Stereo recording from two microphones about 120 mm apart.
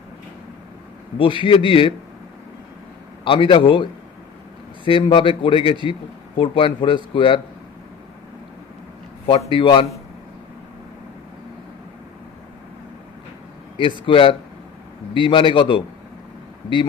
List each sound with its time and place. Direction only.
1.1 s a man's voice: 45° left (ahead or behind)
3.3 s a man's voice: 45° left (ahead or behind)
9.5 s a man's voice: 45° left (ahead or behind)
13.7 s a man's voice: 45° left (ahead or behind)